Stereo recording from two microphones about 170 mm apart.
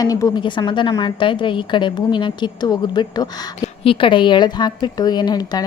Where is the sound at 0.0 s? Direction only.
20° left (ahead or behind).